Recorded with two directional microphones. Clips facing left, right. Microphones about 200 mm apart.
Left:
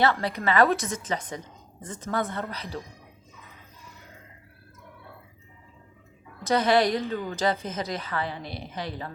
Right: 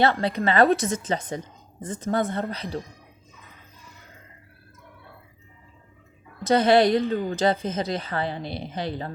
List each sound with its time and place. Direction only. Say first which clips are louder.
0.0 s a woman's voice: right 3 dB; 25° right (ahead or behind)
6.4 s a woman's voice: right 4 dB; 25° right (ahead or behind)